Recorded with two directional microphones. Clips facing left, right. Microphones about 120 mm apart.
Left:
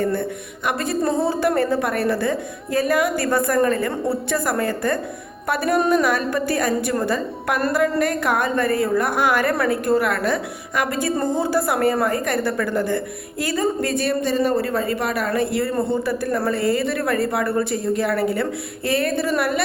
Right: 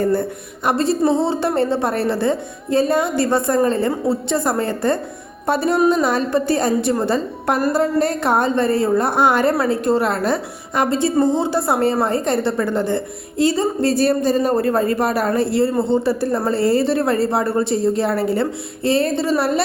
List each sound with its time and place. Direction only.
0.0 s a woman's voice: 35° right (ahead or behind)